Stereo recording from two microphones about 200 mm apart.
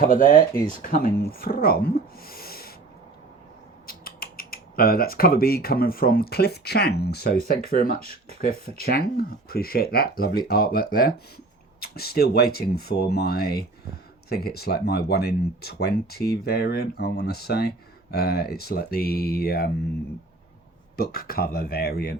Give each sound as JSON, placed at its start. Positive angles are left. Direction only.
{"t": 0.0, "sound": "speech", "side_deg": 40}
{"t": 3.8, "sound": "speech", "side_deg": 45}
{"t": 20.9, "sound": "speech", "side_deg": 50}